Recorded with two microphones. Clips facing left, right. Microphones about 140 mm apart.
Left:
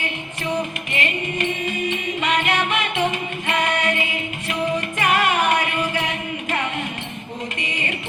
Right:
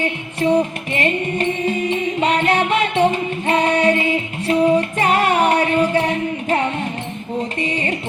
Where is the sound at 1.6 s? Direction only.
30° right (ahead or behind).